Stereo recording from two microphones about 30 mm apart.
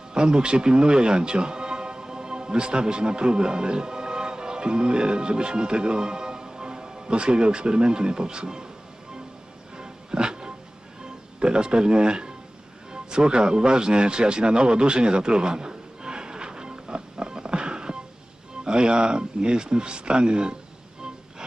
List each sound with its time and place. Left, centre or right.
0.1 s speech: right
9.7 s music: right
11.0 s speech: right
12.9 s music: right
18.6 s speech: right